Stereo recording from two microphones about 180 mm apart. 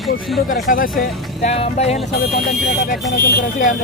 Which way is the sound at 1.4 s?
35° left (ahead or behind).